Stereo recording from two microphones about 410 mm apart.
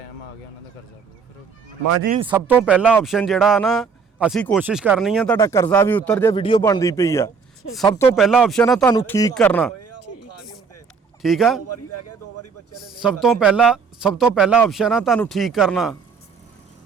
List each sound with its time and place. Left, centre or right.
2.0 s speech: centre
2.3 s speech: centre
9.7 s a sound: left
11.2 s speech: centre
11.6 s a man's voice: left
13.0 s speech: centre